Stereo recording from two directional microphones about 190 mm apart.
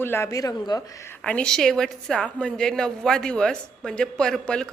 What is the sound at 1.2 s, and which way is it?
A woman's voice, 5° left (ahead or behind).